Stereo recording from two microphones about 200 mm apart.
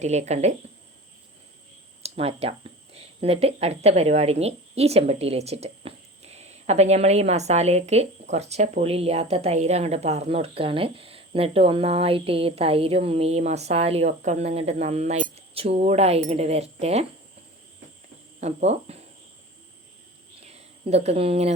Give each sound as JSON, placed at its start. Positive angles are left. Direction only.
{"t": 0.0, "sound": "speech", "side_deg": -35}
{"t": 2.0, "sound": "speech", "side_deg": -30}
{"t": 18.3, "sound": "speech", "side_deg": -35}
{"t": 20.4, "sound": "a sound", "side_deg": -30}